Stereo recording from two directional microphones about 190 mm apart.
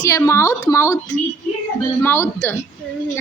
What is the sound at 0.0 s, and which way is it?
Speech, 15° left (ahead or behind).